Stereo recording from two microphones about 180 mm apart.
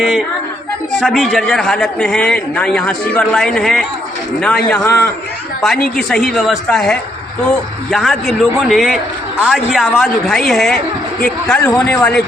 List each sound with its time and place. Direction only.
0.0 s a man's voice: centre (ahead or behind)
6.2 s a man's voice: centre (ahead or behind)
11.7 s speech: 15° left (ahead or behind)